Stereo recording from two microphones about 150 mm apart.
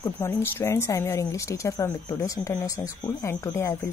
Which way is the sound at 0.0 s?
20° left (ahead or behind).